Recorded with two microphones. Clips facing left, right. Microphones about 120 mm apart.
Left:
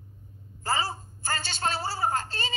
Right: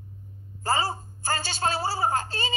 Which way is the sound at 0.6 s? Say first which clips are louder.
Right 3 dB; 40° right (ahead or behind).